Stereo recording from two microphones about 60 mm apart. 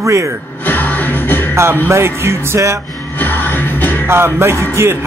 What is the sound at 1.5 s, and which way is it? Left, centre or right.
Music, right.